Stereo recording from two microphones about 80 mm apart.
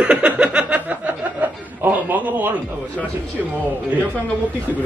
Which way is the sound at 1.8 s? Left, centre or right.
Right.